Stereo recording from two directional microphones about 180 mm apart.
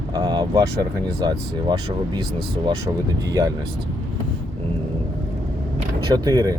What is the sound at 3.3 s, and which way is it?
Speech, 20° right (ahead or behind).